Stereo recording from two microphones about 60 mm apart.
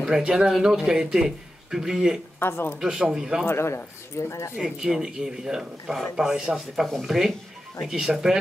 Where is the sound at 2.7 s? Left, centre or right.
Centre.